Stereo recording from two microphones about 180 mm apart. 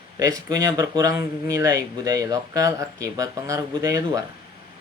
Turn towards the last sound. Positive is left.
turn(degrees=-20)  # may be behind; listen again after turning